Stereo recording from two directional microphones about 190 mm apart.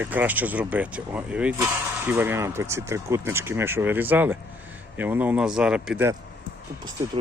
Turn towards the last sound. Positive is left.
turn(degrees=-15)  # may be behind; listen again after turning